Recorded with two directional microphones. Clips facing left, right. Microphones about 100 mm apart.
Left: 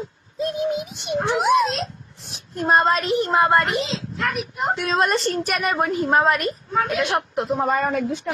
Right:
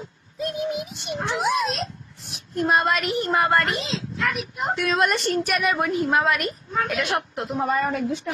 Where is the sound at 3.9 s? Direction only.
Centre (ahead or behind).